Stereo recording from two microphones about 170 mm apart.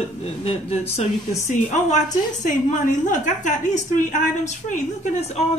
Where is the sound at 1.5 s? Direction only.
45° left (ahead or behind).